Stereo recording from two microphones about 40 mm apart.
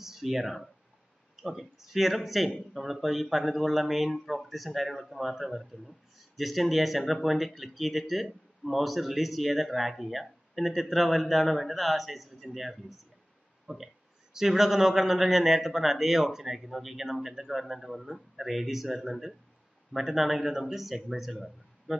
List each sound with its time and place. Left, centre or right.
0.0 s speech: centre
13.7 s speech: centre